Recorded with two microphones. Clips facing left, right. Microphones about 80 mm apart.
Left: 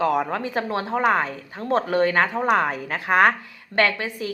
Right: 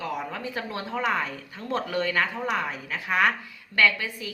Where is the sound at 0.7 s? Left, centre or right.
Left.